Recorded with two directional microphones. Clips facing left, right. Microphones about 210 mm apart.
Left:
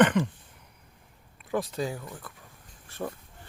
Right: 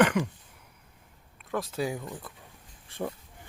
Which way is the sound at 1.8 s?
15° right (ahead or behind).